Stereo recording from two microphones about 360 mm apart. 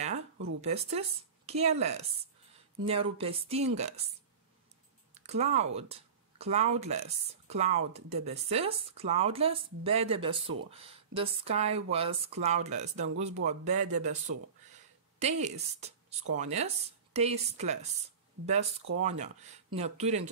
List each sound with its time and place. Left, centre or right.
0.6 s speech: centre
5.1 s speech: centre
15.4 s speech: centre